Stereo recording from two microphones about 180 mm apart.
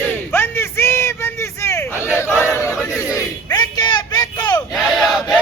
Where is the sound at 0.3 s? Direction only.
10° left (ahead or behind).